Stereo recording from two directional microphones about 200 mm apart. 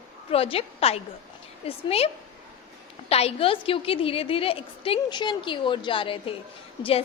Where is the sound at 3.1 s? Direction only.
30° left (ahead or behind).